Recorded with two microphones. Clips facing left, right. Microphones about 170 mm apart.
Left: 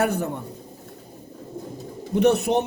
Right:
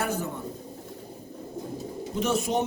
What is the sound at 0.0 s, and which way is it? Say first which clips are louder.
Speech: left 6 dB; 60° left (ahead or behind).